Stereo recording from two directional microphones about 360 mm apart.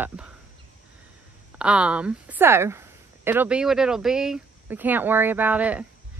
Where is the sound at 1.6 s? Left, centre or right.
Centre.